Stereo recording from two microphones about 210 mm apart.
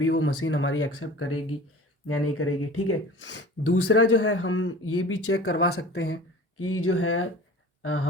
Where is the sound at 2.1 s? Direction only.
90° left.